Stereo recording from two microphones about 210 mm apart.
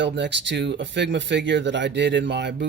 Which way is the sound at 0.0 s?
55° right (ahead or behind).